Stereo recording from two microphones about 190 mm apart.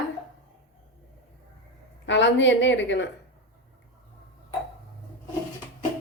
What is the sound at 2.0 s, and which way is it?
A woman's voice, 70° left (ahead or behind).